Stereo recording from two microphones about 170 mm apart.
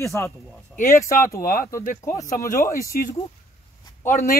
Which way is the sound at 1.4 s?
55° left (ahead or behind).